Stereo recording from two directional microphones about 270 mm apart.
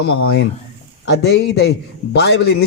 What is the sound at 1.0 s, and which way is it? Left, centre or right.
A man's voice, left.